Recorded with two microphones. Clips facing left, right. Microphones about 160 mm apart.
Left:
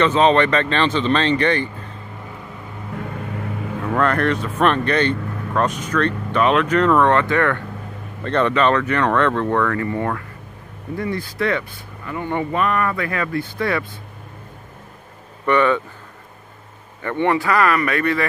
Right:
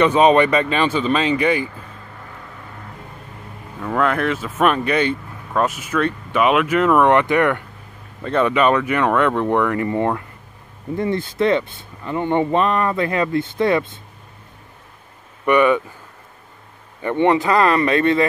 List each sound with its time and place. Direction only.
0.0 s speech: 15° right (ahead or behind)
3.0 s a sound: 90° left
3.9 s speech: 5° right (ahead or behind); by 13.8 s 20° right (ahead or behind)
15.4 s speech: 15° right (ahead or behind)
17.0 s speech: 20° right (ahead or behind)